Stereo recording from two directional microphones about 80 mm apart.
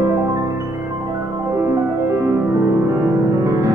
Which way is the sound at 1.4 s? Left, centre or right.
Right.